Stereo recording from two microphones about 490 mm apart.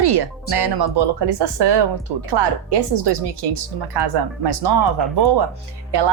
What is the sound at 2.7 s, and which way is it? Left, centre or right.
A woman's voice, right.